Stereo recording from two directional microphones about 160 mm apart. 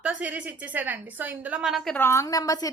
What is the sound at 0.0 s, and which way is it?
A woman's voice, 10° right (ahead or behind).